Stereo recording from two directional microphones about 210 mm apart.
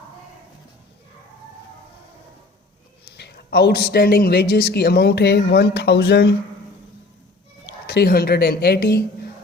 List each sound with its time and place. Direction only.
3.2 s speech: 50° left (ahead or behind)
7.9 s speech: 50° left (ahead or behind)